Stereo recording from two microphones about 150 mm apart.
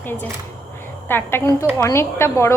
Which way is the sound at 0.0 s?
15° left (ahead or behind).